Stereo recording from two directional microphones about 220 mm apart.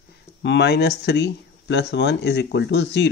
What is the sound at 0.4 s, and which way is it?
Speech, 50° left (ahead or behind).